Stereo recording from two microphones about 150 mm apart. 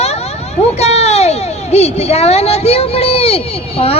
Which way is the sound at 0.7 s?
45° left (ahead or behind).